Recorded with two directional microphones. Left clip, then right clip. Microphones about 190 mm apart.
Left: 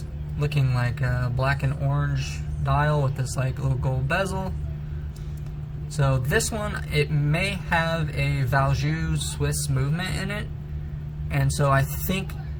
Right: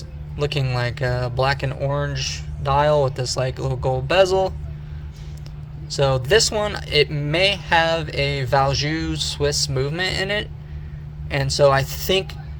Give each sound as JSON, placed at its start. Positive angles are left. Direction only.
{"t": 0.3, "sound": "speech", "side_deg": -40}
{"t": 6.0, "sound": "speech", "side_deg": -40}